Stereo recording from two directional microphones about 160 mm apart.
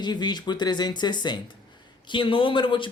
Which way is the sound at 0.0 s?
25° left (ahead or behind).